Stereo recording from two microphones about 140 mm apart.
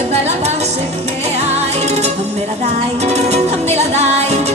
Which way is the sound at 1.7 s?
50° right (ahead or behind).